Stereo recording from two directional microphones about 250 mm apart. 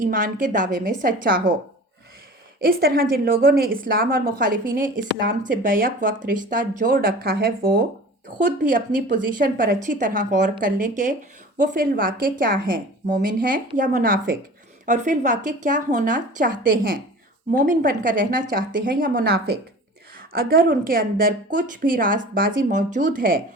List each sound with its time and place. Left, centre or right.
0.0 s a woman's voice: right
2.6 s a woman's voice: right